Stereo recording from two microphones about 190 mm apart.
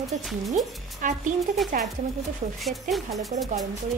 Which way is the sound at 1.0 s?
45° right (ahead or behind).